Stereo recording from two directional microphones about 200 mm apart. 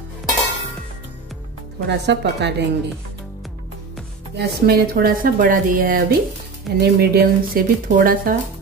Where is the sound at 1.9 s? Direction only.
55° right (ahead or behind).